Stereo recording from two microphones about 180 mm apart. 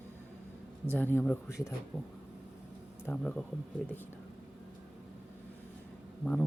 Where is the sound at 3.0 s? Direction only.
5° left (ahead or behind).